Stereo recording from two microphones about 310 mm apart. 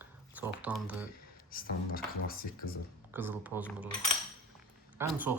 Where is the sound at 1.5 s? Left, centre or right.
Left.